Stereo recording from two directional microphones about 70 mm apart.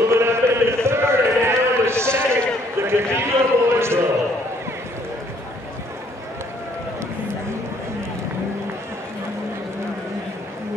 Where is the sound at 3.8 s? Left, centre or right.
Right.